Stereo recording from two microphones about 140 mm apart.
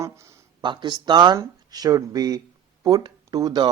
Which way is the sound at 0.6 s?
35° right (ahead or behind).